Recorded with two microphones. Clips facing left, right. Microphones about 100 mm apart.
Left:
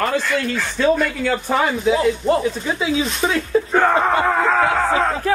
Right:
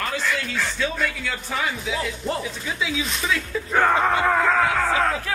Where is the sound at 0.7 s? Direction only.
45° left (ahead or behind).